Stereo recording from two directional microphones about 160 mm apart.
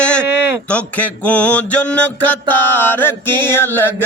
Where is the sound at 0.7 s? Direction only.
10° left (ahead or behind).